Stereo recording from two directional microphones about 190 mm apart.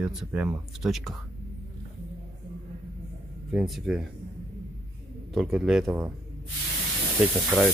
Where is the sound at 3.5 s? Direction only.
Centre (ahead or behind).